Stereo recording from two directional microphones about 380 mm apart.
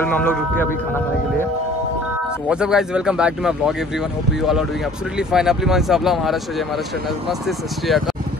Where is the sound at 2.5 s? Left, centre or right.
Centre.